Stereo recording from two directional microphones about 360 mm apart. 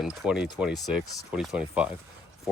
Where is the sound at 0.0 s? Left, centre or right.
Centre.